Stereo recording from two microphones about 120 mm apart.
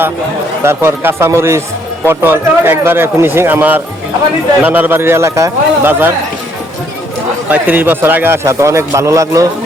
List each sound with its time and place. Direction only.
0.6 s speech: 20° right (ahead or behind)
7.5 s speech: 15° right (ahead or behind)